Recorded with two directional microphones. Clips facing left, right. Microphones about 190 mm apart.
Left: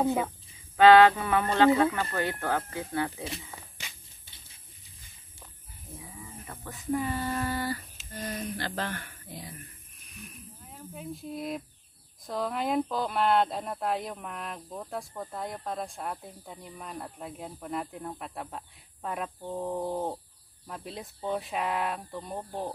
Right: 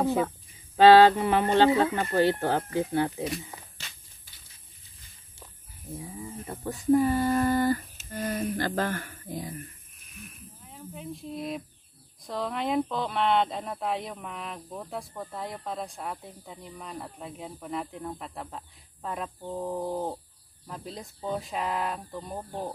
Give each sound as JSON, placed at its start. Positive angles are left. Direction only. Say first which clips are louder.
{"t": 0.0, "sound": "speech", "louder": "right 1 dB", "side_deg": 15}
{"t": 0.7, "sound": "speech", "louder": "right 2 dB", "side_deg": -30}
{"t": 5.9, "sound": "speech", "louder": "right 7 dB", "side_deg": -35}
{"t": 10.1, "sound": "speech", "louder": "even", "side_deg": 0}